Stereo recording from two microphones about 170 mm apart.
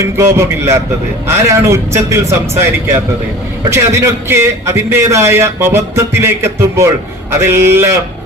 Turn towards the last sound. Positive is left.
turn(degrees=-15)  # may be behind; listen again after turning